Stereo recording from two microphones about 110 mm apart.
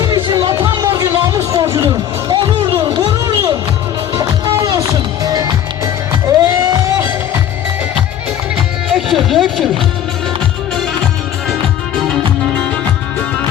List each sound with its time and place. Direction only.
0.0 s music: 40° right (ahead or behind)
1.4 s a sound: 30° right (ahead or behind)
2.3 s music: 45° right (ahead or behind)
4.5 s run: 35° right (ahead or behind)
5.2 s music: 40° right (ahead or behind)
8.9 s a sound: centre (ahead or behind)
11.9 s music: 5° left (ahead or behind)